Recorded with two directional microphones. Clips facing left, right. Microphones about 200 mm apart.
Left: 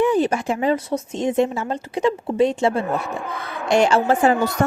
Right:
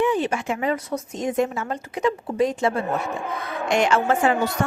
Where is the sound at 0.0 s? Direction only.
40° left (ahead or behind).